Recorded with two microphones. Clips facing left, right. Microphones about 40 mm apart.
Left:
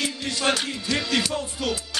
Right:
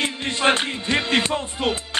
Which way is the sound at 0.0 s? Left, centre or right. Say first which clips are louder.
Right 4 dB; right.